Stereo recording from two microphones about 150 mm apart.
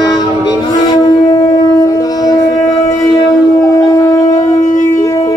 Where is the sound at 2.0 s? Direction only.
25° left (ahead or behind).